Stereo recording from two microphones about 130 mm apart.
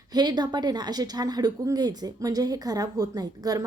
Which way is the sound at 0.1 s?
30° right (ahead or behind).